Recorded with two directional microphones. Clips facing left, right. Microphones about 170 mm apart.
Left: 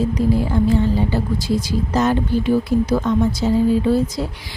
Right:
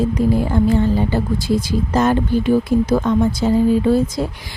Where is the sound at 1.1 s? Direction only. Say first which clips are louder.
Right 2 dB; 50° right (ahead or behind).